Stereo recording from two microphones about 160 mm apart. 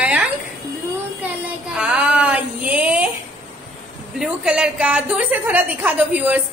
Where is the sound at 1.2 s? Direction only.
5° right (ahead or behind).